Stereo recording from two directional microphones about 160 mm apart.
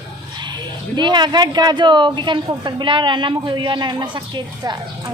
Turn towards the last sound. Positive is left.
turn(degrees=-25)  # may be behind; listen again after turning